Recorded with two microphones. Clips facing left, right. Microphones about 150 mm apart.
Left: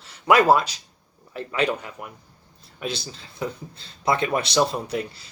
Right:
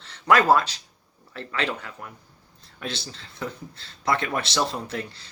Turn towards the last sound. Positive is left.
turn(degrees=15)  # may be behind; listen again after turning